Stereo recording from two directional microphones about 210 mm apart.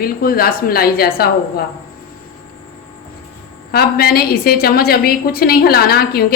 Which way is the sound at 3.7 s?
50° left (ahead or behind).